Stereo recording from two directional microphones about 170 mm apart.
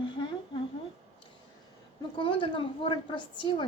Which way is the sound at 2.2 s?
30° left (ahead or behind).